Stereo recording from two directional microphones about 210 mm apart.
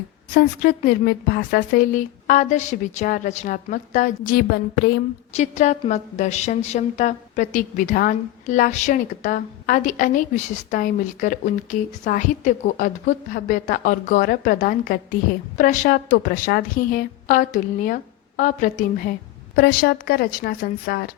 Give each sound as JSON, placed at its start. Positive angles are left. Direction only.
{"t": 0.3, "sound": "a woman's voice", "side_deg": 45}
{"t": 5.4, "sound": "a woman's voice", "side_deg": 35}